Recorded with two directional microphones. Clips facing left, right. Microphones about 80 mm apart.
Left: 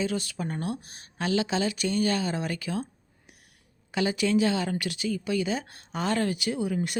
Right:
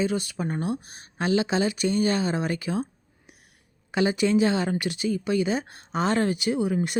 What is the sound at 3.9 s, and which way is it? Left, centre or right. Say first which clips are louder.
Speech: right 3 dB; right.